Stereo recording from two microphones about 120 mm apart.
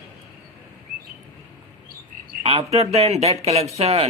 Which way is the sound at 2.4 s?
55° right (ahead or behind).